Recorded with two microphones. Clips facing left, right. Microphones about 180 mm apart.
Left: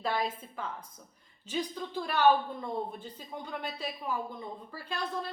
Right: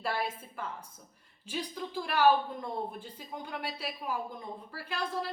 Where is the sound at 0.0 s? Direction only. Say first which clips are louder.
Left 2 dB; 10° right (ahead or behind).